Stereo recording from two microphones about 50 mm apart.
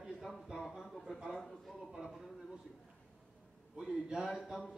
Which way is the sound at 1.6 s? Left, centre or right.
Centre.